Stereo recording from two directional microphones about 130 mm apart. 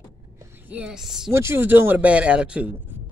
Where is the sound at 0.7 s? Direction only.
10° right (ahead or behind).